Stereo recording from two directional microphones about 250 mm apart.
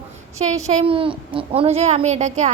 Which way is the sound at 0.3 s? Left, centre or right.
Right.